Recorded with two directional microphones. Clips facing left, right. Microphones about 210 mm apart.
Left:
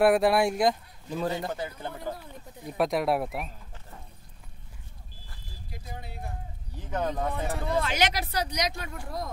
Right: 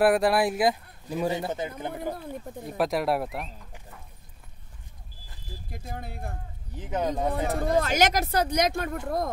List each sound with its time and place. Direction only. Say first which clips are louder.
0.0 s speech: even; centre (ahead or behind); by 1.7 s 20° right (ahead or behind)
2.8 s speech: even; centre (ahead or behind)
5.7 s speech: right 4 dB; 50° right (ahead or behind)
6.7 s speech: right 2 dB; 20° right (ahead or behind)
7.2 s speech: right 4 dB; 40° right (ahead or behind)